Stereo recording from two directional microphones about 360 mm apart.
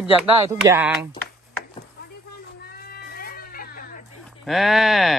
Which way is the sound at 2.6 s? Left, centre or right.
Left.